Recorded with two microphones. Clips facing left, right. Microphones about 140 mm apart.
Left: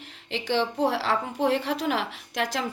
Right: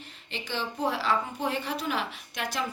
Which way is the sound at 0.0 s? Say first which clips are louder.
Left 6 dB; 90° left.